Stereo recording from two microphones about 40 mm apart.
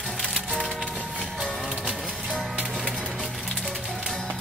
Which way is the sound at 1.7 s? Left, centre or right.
Right.